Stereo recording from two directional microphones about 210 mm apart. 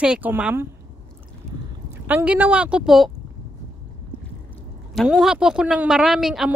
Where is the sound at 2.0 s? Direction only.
5° right (ahead or behind).